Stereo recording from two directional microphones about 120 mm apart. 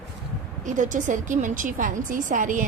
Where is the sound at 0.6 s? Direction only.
90° right.